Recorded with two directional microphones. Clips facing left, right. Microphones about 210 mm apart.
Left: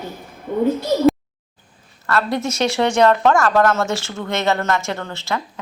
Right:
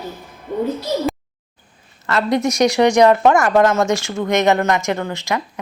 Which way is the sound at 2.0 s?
20° right (ahead or behind).